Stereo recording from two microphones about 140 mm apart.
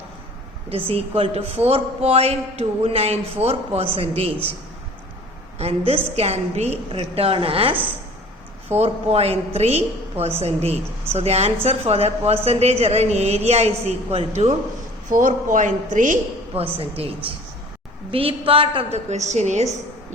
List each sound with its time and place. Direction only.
0.7 s a woman's voice: 45° right (ahead or behind)
5.5 s a woman's voice: 45° right (ahead or behind)
15.1 s speech: 70° right (ahead or behind)
16.6 s a woman's voice: 45° right (ahead or behind)
18.1 s a woman's voice: 40° right (ahead or behind)